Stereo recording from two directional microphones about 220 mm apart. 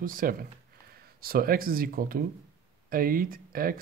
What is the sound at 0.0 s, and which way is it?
Speech, 40° right (ahead or behind).